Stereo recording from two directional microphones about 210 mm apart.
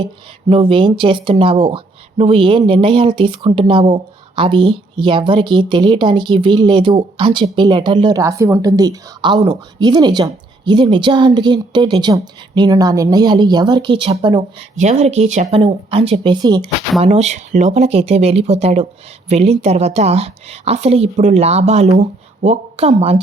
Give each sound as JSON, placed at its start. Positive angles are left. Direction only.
{"t": 0.0, "sound": "speech", "side_deg": -20}
{"t": 14.8, "sound": "speech", "side_deg": -30}
{"t": 17.0, "sound": "a woman's voice", "side_deg": -30}